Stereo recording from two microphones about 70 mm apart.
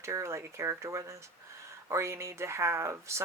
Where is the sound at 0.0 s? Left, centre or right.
Right.